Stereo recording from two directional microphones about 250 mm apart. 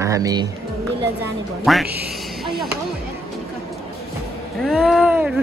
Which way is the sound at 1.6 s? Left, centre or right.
Centre.